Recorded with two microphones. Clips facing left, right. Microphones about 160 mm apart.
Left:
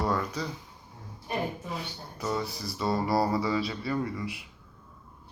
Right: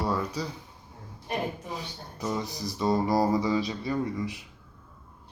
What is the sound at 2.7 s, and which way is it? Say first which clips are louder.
Mantra: right 2 dB; 20° right (ahead or behind).